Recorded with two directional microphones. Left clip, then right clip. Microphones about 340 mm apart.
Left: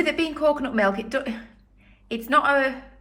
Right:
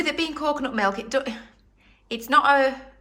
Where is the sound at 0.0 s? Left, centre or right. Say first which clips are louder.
Left 3 dB; centre.